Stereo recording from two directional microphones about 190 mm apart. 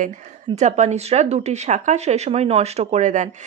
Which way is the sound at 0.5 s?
35° right (ahead or behind).